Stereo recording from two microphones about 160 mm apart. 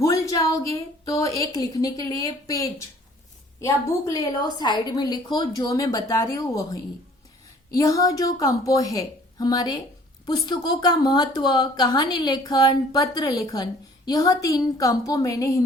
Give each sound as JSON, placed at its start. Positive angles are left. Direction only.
{"t": 0.0, "sound": "a woman's voice", "side_deg": 20}